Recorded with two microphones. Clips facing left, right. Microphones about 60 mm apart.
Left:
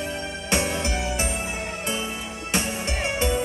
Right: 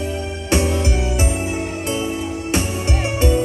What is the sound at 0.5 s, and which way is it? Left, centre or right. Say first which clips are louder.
Music: right 6 dB; centre.